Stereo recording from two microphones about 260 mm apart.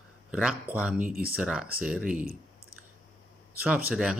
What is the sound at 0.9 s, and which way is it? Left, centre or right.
Speech, right.